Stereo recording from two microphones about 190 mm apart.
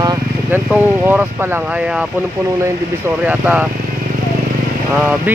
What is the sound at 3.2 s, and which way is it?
Speech, 5° right (ahead or behind).